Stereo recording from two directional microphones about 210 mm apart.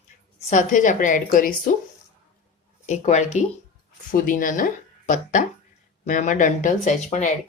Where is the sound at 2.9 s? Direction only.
30° left (ahead or behind).